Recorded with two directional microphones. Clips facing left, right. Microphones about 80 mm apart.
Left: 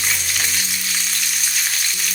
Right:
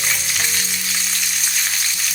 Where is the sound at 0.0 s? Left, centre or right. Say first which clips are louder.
Even; centre.